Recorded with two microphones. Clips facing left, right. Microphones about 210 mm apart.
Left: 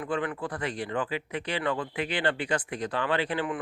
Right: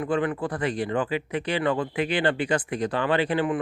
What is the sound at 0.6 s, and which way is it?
Speech, 15° right (ahead or behind).